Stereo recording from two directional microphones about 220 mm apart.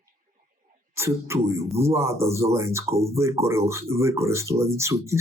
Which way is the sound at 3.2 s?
10° right (ahead or behind).